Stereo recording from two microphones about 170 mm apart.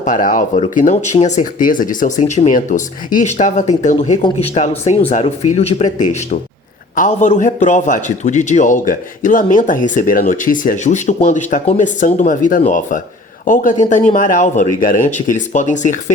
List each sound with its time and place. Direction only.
0.0 s speech: 50° left (ahead or behind)